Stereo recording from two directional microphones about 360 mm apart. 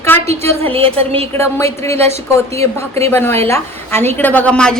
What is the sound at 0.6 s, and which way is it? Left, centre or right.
Speech, centre.